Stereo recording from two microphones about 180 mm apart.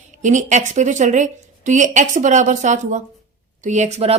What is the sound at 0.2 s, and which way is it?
A woman's voice, 45° right (ahead or behind).